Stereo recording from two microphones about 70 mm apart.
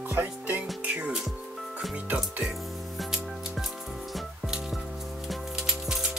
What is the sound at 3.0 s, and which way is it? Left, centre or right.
Music, centre.